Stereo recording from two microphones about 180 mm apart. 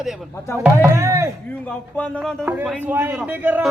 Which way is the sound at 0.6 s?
10° right (ahead or behind).